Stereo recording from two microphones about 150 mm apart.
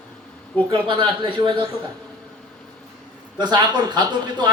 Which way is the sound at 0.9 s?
30° right (ahead or behind).